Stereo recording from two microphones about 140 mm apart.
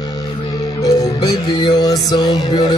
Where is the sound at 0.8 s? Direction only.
25° left (ahead or behind).